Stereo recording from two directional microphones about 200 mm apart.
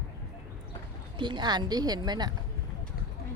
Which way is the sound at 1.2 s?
25° right (ahead or behind).